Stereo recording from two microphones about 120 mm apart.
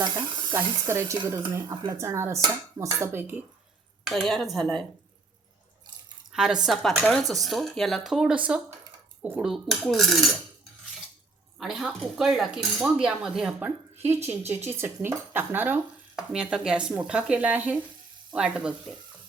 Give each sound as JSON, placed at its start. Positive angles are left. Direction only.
{"t": 0.5, "sound": "dishes", "side_deg": -20}
{"t": 4.0, "sound": "speech", "side_deg": 0}
{"t": 6.3, "sound": "speech", "side_deg": -5}
{"t": 11.6, "sound": "speech", "side_deg": -5}